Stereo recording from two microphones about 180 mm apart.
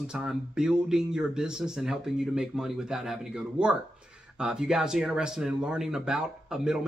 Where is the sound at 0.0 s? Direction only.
5° right (ahead or behind).